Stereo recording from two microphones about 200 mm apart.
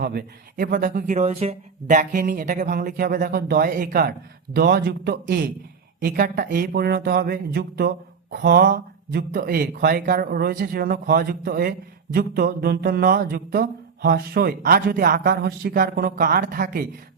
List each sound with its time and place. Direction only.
0.0 s speech: 50° right (ahead or behind)